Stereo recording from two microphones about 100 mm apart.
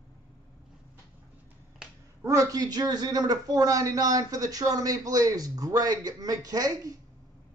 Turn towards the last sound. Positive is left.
turn(degrees=-40)  # may be behind; listen again after turning